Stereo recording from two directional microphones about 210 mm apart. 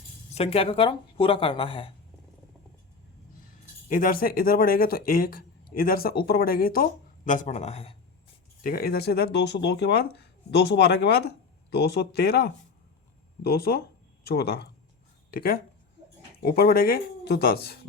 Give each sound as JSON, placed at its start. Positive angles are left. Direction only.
{"t": 0.3, "sound": "speech", "side_deg": 25}
{"t": 3.8, "sound": "a man's voice", "side_deg": 40}
{"t": 8.6, "sound": "speech", "side_deg": 45}